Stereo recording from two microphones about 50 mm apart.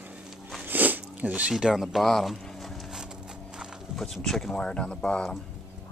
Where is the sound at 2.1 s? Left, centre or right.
Centre.